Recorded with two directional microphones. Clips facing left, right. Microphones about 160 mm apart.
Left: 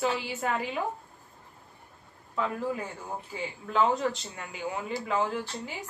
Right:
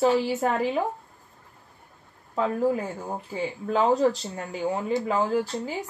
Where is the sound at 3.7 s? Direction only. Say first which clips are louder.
Right 5 dB; 35° right (ahead or behind).